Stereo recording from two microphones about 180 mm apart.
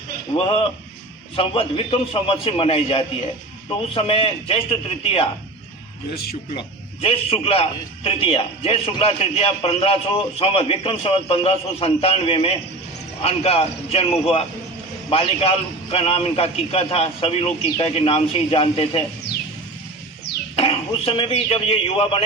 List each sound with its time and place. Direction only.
0.3 s a man's voice: 30° left (ahead or behind)
6.6 s a man's voice: 30° left (ahead or behind)
20.6 s a man's voice: 30° left (ahead or behind)